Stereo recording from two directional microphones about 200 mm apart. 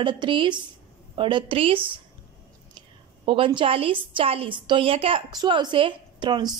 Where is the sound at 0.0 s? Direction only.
25° right (ahead or behind).